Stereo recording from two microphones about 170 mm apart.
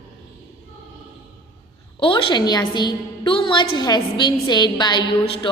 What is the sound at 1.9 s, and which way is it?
A woman's voice, 30° left (ahead or behind).